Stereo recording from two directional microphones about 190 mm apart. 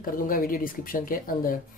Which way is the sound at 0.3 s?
50° left (ahead or behind).